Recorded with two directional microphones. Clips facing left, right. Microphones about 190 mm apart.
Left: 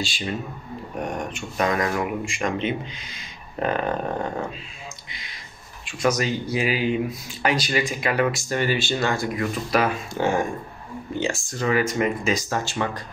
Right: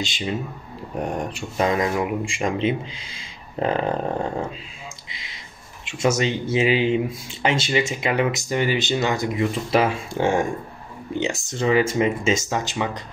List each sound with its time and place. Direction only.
0.0 s speech: 20° right (ahead or behind)
0.9 s speech: 30° right (ahead or behind)
5.1 s a sound: 25° right (ahead or behind)
5.9 s speech: 25° right (ahead or behind)